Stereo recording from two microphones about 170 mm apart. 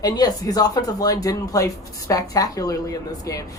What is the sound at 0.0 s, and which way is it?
A woman's voice, 20° left (ahead or behind).